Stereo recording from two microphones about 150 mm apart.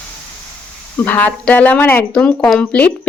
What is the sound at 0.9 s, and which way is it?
Speech, 10° left (ahead or behind).